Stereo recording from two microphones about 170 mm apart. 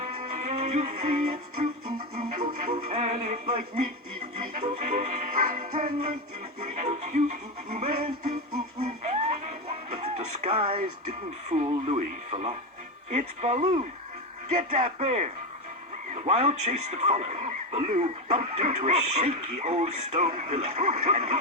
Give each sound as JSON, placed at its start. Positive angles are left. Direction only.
{"t": 0.0, "sound": "music", "side_deg": -40}
{"t": 2.1, "sound": "speech", "side_deg": -35}
{"t": 8.8, "sound": "music", "side_deg": -40}
{"t": 11.4, "sound": "speech", "side_deg": -40}